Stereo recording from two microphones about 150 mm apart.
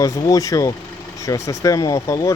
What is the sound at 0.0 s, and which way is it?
Speech, 20° left (ahead or behind).